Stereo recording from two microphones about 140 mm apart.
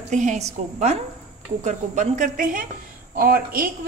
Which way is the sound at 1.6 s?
60° right (ahead or behind).